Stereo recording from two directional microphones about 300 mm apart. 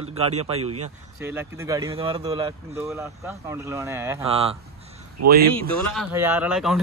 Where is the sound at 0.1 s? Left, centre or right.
Right.